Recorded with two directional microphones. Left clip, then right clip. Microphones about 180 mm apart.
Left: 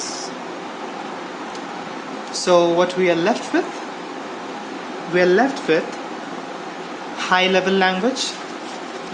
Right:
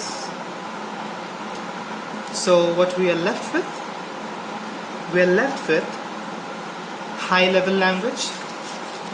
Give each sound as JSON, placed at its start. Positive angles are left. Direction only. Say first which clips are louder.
{"t": 2.4, "sound": "speech", "louder": "left 2 dB", "side_deg": 60}
{"t": 5.1, "sound": "speech", "louder": "left 2 dB", "side_deg": 60}
{"t": 7.3, "sound": "speech", "louder": "left 1 dB", "side_deg": 65}